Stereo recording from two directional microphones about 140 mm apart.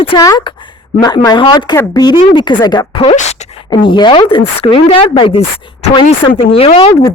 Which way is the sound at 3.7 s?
35° left (ahead or behind).